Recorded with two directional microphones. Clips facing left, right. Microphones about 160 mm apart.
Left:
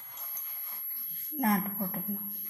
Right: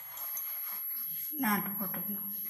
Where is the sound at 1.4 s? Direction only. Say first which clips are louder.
Left 4 dB; 35° left (ahead or behind).